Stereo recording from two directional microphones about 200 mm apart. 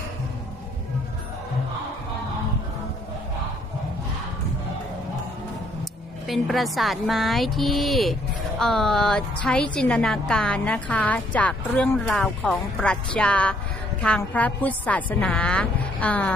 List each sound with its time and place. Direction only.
6.2 s a woman's voice: centre (ahead or behind)